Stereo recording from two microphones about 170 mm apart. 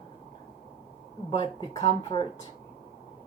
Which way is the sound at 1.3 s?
35° left (ahead or behind).